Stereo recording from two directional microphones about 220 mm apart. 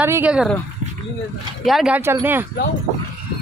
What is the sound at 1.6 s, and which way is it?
Speech, centre (ahead or behind).